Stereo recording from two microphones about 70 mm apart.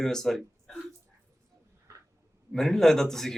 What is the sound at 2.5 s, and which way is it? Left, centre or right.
Speech, centre.